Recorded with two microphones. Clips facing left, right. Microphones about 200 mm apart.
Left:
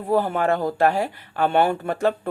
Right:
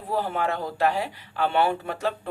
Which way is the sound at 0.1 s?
50° left (ahead or behind).